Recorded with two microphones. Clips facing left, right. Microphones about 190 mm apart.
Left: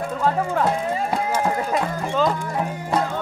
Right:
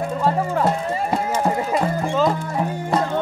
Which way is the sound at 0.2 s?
5° right (ahead or behind).